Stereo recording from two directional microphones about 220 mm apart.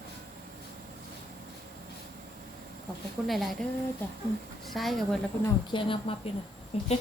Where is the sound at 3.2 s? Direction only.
Centre (ahead or behind).